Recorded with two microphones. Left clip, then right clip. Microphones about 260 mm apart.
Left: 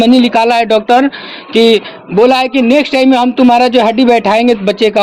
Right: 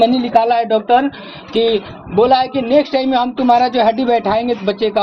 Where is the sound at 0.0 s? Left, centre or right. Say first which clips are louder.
Left 4 dB; left.